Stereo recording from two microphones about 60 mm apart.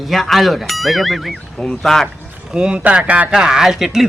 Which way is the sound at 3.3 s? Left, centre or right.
Centre.